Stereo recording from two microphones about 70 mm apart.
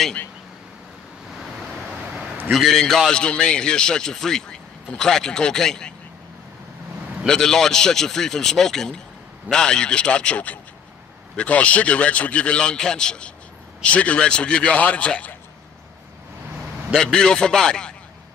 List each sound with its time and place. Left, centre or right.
2.5 s a man's voice: centre
7.2 s a man's voice: centre
16.9 s a man's voice: centre